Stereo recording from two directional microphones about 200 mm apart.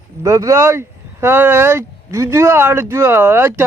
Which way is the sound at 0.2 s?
15° right (ahead or behind).